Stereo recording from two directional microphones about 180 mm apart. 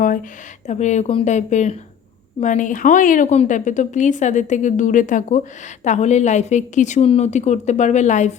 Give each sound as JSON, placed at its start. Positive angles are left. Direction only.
{"t": 0.7, "sound": "a woman's voice", "side_deg": 40}